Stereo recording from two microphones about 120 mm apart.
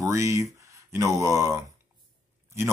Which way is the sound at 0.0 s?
25° right (ahead or behind).